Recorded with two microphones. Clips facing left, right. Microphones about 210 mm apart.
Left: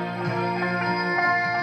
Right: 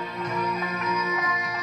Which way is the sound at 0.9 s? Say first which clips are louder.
Left 3 dB; 50° left (ahead or behind).